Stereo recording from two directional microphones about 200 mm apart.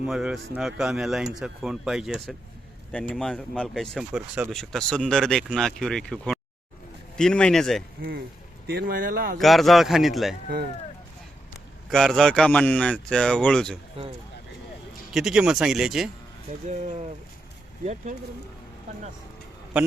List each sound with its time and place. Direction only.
0.0 s speech: 5° right (ahead or behind)
8.6 s speech: 50° right (ahead or behind)
9.4 s speech: centre (ahead or behind)
11.9 s speech: centre (ahead or behind)
14.0 s speech: 30° right (ahead or behind)
15.1 s speech: 5° right (ahead or behind)
16.6 s speech: 35° right (ahead or behind)